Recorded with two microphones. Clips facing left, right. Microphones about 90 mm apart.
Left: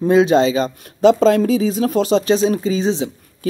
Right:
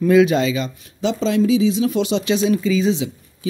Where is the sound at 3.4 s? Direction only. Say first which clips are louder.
Left 3 dB; 50° left (ahead or behind).